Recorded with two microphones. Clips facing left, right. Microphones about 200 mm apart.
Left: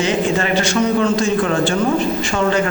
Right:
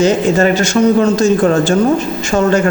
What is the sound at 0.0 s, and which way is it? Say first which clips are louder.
A man's voice: right 7 dB; 45° right (ahead or behind).